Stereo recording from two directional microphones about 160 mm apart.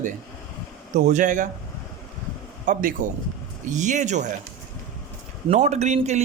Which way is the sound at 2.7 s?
55° right (ahead or behind).